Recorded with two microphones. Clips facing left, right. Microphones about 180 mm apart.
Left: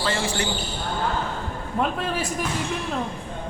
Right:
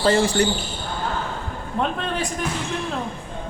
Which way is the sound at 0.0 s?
40° right (ahead or behind).